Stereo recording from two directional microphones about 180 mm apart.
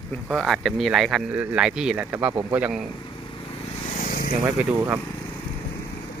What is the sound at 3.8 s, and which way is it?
Vehicle, 45° left (ahead or behind).